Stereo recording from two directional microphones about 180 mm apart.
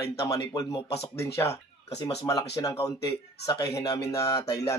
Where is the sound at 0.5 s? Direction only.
20° left (ahead or behind).